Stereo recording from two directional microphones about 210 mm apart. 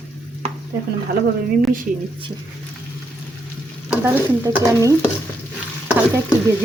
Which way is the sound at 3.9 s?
10° right (ahead or behind).